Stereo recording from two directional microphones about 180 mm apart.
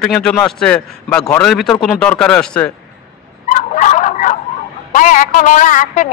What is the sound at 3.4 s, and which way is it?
Dog, 45° left (ahead or behind).